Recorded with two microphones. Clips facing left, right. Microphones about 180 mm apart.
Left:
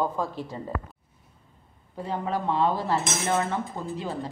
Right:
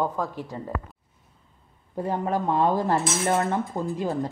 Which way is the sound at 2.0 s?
45° right (ahead or behind).